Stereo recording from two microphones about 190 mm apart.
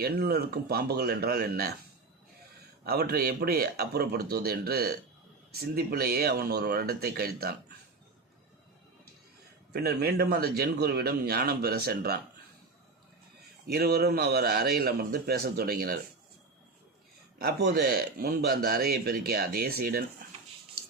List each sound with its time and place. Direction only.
0.0 s speech: 55° right (ahead or behind)
2.8 s speech: 55° right (ahead or behind)
9.7 s speech: 55° right (ahead or behind)
13.7 s speech: 55° right (ahead or behind)
17.4 s speech: 60° right (ahead or behind)